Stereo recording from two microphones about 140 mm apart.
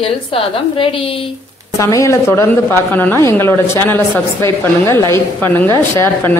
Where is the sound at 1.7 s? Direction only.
20° left (ahead or behind).